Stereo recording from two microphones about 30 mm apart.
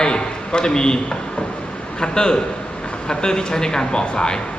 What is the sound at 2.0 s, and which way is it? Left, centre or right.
A man's voice, left.